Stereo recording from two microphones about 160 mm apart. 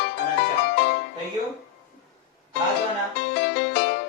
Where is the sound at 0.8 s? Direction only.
85° left.